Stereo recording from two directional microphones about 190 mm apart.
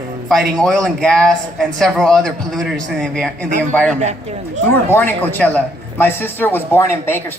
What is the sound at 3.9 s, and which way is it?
Speech, 35° right (ahead or behind).